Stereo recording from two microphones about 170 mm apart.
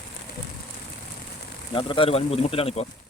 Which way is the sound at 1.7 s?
30° left (ahead or behind).